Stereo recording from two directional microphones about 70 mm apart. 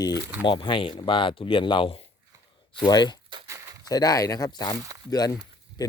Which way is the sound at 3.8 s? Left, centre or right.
Left.